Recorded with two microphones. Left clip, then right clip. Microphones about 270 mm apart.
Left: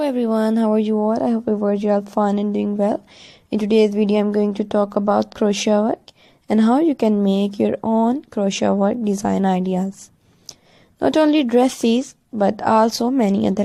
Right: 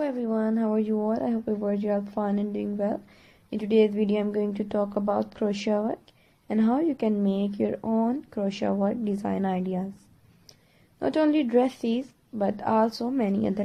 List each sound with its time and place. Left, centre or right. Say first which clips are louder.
0.0 s speech: left 8 dB; left
11.0 s speech: left 8 dB; left